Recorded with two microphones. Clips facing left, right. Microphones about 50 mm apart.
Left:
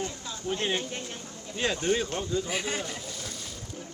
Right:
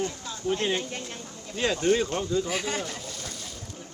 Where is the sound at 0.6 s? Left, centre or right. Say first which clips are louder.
Even; left.